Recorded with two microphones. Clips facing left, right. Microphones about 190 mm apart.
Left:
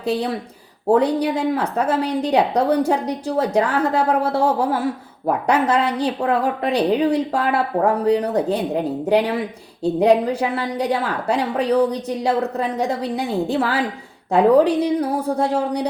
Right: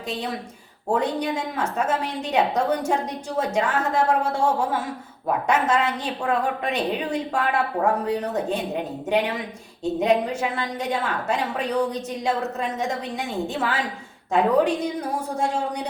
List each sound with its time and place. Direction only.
0.0 s a woman's voice: 35° left (ahead or behind)